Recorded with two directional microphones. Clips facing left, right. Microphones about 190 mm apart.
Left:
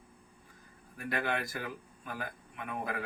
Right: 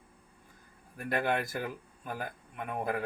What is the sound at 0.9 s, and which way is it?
Speech, 50° right (ahead or behind).